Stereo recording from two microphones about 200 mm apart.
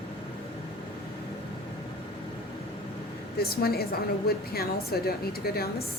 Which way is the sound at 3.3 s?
50° left (ahead or behind).